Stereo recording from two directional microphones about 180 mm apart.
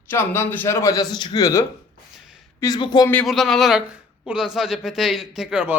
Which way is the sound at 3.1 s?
Centre (ahead or behind).